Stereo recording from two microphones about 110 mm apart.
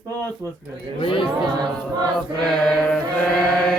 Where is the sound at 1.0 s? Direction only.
50° left (ahead or behind).